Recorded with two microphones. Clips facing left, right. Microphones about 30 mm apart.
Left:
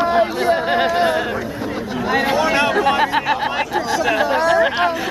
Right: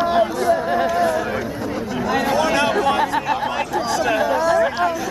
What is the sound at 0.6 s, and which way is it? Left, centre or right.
Speech, left.